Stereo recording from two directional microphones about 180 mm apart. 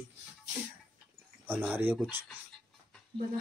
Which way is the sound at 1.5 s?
10° right (ahead or behind).